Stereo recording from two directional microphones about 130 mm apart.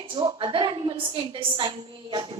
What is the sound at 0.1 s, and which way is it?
A woman's voice, 40° right (ahead or behind).